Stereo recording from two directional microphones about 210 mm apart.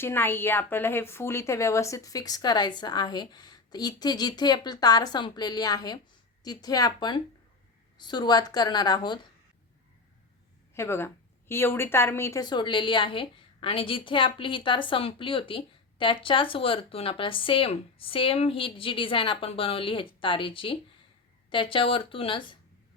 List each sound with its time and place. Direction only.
0.0 s a woman's voice: 10° left (ahead or behind)
10.8 s a woman's voice: 10° left (ahead or behind)